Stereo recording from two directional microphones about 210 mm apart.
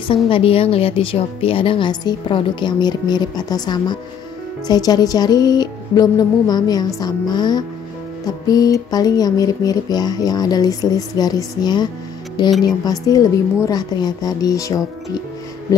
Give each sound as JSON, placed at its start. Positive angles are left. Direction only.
{"t": 0.1, "sound": "a woman's voice", "side_deg": 25}